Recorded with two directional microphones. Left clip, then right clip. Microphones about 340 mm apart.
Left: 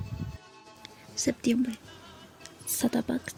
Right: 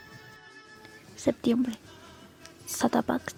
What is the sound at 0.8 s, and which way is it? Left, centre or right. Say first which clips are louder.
Music: right 2 dB; centre.